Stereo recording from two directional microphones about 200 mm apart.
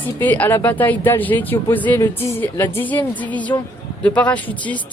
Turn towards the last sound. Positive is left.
turn(degrees=5)  # may be behind; listen again after turning